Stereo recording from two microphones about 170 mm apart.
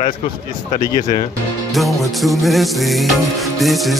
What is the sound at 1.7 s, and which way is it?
Speech, centre (ahead or behind).